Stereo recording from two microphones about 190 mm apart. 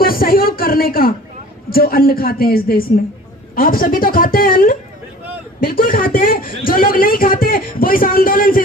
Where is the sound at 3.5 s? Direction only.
45° left (ahead or behind).